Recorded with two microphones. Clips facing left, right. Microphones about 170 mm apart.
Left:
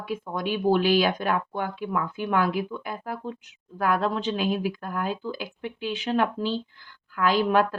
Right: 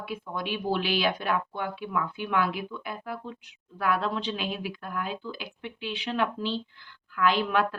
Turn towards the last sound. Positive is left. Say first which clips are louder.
# left 4 dB
turn(degrees=40)  # may be behind; listen again after turning